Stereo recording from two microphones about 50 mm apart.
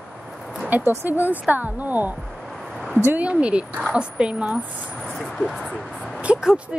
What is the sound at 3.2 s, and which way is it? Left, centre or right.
A woman's voice, right.